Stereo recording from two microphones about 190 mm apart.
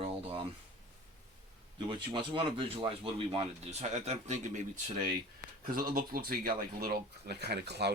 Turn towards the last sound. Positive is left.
turn(degrees=-60)  # may be behind; listen again after turning